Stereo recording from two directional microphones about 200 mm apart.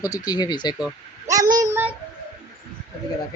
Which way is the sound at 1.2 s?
15° right (ahead or behind).